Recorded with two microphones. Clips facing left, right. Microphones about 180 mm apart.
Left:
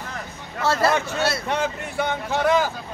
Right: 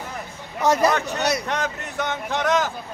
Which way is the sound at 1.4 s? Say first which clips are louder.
Left 2 dB; 10° left (ahead or behind).